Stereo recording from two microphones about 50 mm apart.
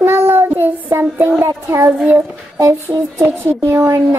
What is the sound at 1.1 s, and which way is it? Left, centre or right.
Speech, right.